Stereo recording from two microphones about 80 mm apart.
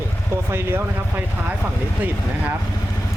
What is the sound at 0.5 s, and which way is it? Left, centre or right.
Speech, right.